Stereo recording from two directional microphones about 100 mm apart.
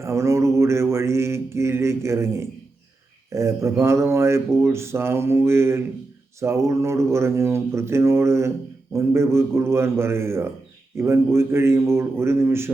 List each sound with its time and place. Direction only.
0.0 s speech: 30° right (ahead or behind)